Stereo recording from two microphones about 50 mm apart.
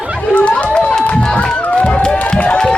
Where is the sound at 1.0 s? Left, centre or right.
Left.